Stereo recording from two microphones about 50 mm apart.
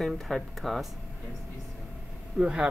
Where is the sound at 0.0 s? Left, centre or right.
Centre.